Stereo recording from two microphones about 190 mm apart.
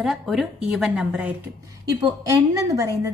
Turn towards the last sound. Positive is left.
turn(degrees=-15)  # may be behind; listen again after turning